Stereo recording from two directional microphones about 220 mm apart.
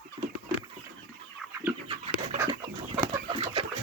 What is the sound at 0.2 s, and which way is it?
Chicken, 25° right (ahead or behind).